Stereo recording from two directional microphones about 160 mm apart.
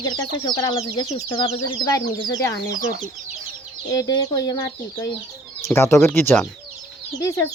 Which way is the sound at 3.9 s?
20° left (ahead or behind).